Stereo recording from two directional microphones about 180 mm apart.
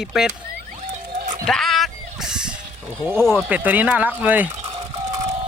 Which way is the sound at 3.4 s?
10° right (ahead or behind).